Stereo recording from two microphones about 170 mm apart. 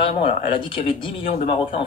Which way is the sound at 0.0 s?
35° left (ahead or behind).